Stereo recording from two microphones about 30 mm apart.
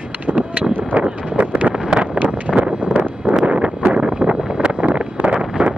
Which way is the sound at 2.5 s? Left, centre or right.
Right.